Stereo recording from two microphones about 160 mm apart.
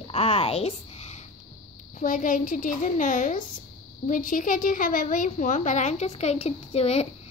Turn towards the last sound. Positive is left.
turn(degrees=40)  # may be behind; listen again after turning